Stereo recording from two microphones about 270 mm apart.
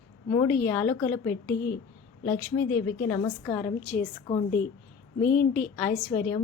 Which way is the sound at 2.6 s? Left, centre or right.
Left.